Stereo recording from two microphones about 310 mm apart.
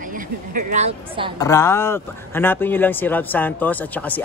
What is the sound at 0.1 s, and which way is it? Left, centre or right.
Speech, right.